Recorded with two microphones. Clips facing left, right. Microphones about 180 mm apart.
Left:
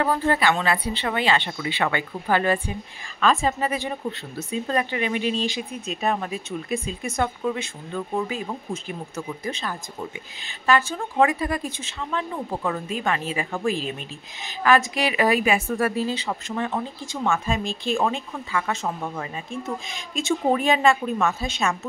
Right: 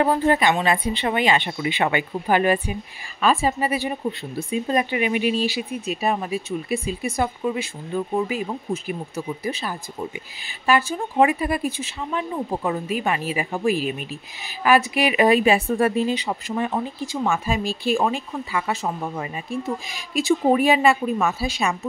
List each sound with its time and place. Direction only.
0.0 s speech: 15° right (ahead or behind)
11.1 s speech: 15° right (ahead or behind)